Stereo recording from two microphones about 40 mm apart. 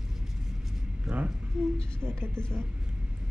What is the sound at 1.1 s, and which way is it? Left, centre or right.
Speech, right.